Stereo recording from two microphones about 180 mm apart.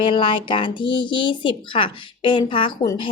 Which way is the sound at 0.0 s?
30° left (ahead or behind).